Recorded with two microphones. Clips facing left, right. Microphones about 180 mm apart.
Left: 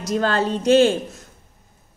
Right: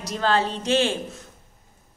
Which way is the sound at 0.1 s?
50° left (ahead or behind).